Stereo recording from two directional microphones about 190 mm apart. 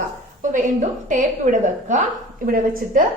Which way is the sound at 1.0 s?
40° right (ahead or behind).